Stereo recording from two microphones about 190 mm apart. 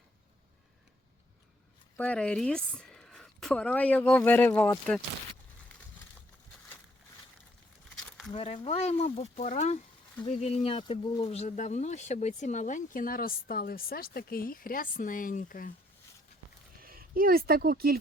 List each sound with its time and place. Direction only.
2.0 s speech: 5° left (ahead or behind)
8.3 s speech: 30° left (ahead or behind); by 15.7 s 45° left (ahead or behind)
16.8 s speech: 50° right (ahead or behind)